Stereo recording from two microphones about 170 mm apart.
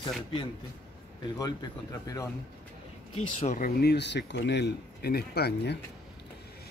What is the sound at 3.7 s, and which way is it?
Speech, 80° left.